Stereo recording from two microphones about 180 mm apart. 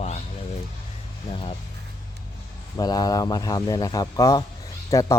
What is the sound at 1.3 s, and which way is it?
Speech, 30° left (ahead or behind).